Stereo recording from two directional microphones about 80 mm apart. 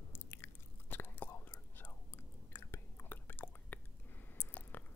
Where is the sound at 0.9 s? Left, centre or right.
Left.